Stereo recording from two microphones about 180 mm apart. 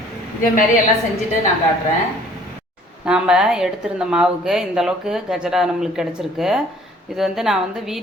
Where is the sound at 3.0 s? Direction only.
5° right (ahead or behind).